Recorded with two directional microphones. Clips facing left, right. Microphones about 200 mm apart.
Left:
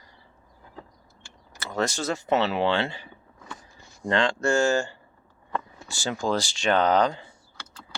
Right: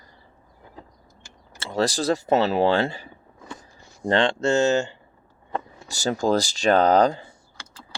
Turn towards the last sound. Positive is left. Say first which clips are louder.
# right 4 dB
turn(degrees=-40)  # may be behind; listen again after turning